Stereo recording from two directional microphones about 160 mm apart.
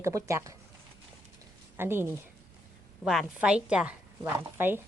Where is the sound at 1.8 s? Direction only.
15° right (ahead or behind).